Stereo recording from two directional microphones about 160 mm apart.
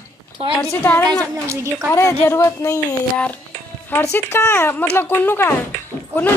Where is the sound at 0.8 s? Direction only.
10° left (ahead or behind).